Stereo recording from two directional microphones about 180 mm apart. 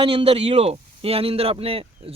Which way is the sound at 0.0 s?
30° right (ahead or behind).